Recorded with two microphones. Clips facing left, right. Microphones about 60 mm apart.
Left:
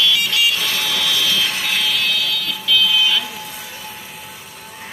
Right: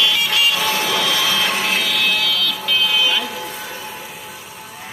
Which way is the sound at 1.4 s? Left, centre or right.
Right.